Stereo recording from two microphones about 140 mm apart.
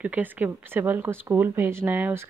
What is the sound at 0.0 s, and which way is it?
A woman's voice, 10° right (ahead or behind).